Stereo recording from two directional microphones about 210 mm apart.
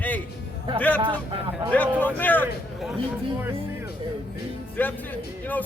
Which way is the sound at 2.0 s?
10° left (ahead or behind).